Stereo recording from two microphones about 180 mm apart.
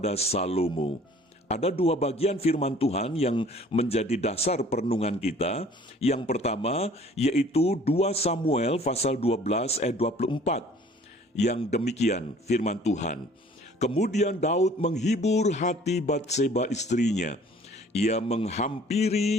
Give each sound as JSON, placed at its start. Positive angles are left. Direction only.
{"t": 0.0, "sound": "speech", "side_deg": 35}